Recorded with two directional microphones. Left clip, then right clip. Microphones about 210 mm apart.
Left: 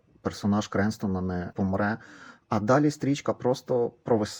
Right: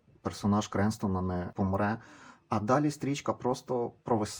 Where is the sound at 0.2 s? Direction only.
10° left (ahead or behind).